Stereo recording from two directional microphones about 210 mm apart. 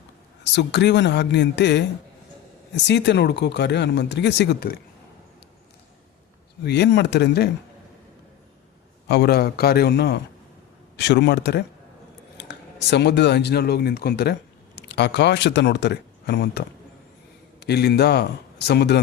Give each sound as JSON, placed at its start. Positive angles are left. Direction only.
{"t": 0.5, "sound": "speech", "side_deg": 55}
{"t": 6.7, "sound": "a man's voice", "side_deg": 55}
{"t": 9.0, "sound": "a man's voice", "side_deg": 50}